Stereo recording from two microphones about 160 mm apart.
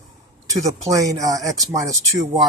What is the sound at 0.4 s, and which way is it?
Speech, 20° right (ahead or behind).